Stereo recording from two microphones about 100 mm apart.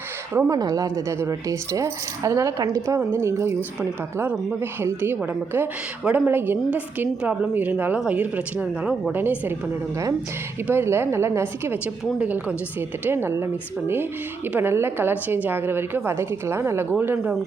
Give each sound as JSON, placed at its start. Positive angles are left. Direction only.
{"t": 0.3, "sound": "a woman's voice", "side_deg": -30}
{"t": 0.6, "sound": "speech", "side_deg": -40}
{"t": 4.6, "sound": "a woman's voice", "side_deg": -25}
{"t": 9.1, "sound": "a woman's voice", "side_deg": -20}
{"t": 10.7, "sound": "a woman's voice", "side_deg": -25}
{"t": 12.2, "sound": "speech", "side_deg": -10}
{"t": 13.1, "sound": "a woman's voice", "side_deg": -25}